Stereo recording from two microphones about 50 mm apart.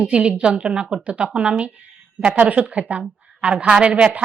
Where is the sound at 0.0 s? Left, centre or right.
Right.